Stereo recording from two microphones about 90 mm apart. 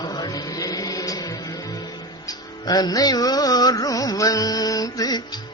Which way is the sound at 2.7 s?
45° left (ahead or behind).